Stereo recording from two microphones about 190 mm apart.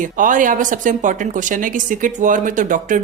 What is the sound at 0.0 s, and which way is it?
Speech, 45° right (ahead or behind).